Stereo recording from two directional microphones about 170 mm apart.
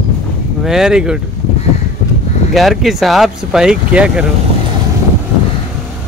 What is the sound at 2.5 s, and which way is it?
Speech, centre (ahead or behind).